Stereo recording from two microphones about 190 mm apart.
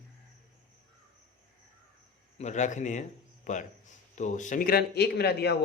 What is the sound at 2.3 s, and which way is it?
A man's voice, 40° left (ahead or behind).